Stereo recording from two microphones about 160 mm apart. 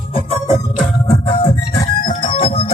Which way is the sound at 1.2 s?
35° left (ahead or behind).